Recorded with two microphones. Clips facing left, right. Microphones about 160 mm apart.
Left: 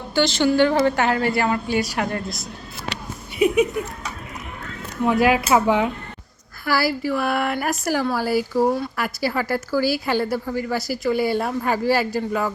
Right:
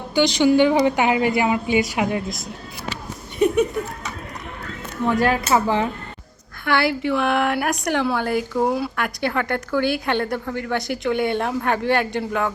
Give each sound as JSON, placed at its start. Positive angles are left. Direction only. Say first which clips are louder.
{"t": 0.1, "sound": "a woman's voice", "louder": "right 2 dB", "side_deg": -15}
{"t": 3.3, "sound": "a sound", "louder": "even", "side_deg": 10}
{"t": 5.0, "sound": "speech", "louder": "left 2 dB", "side_deg": 10}